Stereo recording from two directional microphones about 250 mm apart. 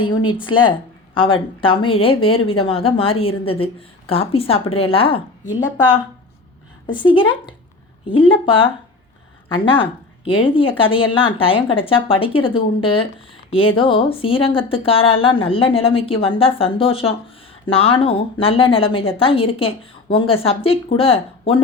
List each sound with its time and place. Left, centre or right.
0.0 s a woman's voice: centre
6.8 s a woman's voice: centre
10.2 s a woman's voice: centre